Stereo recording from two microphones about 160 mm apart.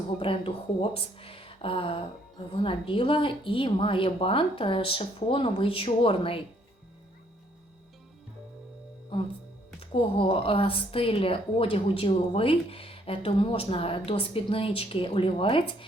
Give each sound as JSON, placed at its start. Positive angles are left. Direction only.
{"t": 0.2, "sound": "a woman's voice", "side_deg": 35}
{"t": 9.1, "sound": "a woman's voice", "side_deg": 30}